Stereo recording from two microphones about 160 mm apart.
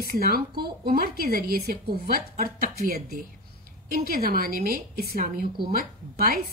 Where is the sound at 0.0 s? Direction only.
70° right (ahead or behind).